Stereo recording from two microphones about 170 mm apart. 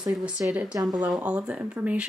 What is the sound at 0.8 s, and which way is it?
Speech, 20° right (ahead or behind).